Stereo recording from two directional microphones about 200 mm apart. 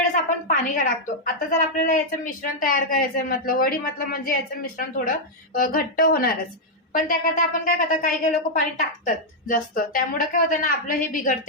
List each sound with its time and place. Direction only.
0.4 s a woman's voice: 40° left (ahead or behind)